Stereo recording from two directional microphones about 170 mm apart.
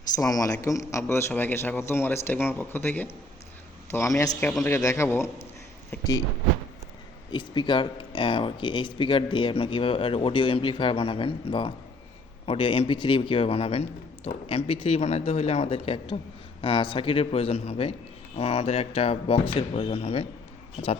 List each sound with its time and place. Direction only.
0.2 s a man's voice: 20° left (ahead or behind)
7.3 s speech: 25° left (ahead or behind)